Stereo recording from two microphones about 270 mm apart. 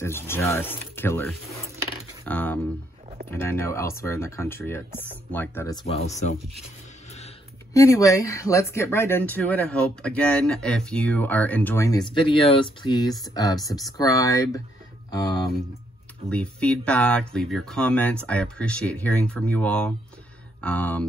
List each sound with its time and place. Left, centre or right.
0.0 s speech: centre
7.7 s speech: centre